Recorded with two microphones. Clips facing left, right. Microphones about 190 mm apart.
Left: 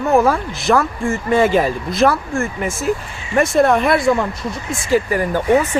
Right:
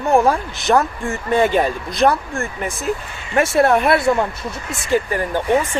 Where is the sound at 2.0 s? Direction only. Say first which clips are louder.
Left 1 dB; 35° right (ahead or behind).